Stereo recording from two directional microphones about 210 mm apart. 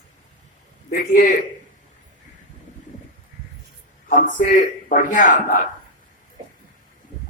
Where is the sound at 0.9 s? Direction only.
40° left (ahead or behind).